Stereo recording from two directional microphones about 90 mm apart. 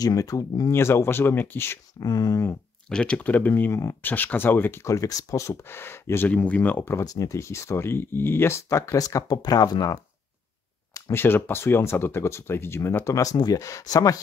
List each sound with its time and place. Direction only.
0.0 s speech: 40° left (ahead or behind)
0.7 s speech: 30° left (ahead or behind)
2.0 s speech: 45° left (ahead or behind)
2.9 s speech: 10° left (ahead or behind)
7.0 s speech: 40° left (ahead or behind)
10.9 s a sound: 40° left (ahead or behind)
11.1 s speech: 25° left (ahead or behind); by 14.2 s 40° left (ahead or behind)